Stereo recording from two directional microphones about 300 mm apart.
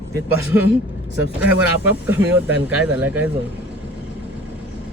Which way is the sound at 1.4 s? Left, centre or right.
Centre.